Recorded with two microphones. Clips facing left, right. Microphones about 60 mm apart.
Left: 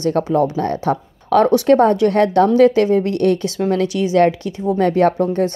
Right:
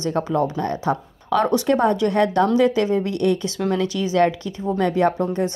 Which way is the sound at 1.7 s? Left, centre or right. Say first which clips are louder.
Left 6 dB; left.